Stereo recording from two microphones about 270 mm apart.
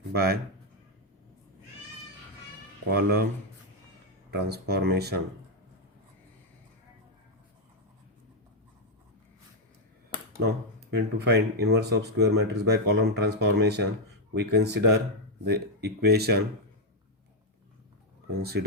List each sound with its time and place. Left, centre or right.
0.1 s a man's voice: right
2.9 s speech: right
4.4 s speech: right
10.9 s speech: right
18.3 s speech: right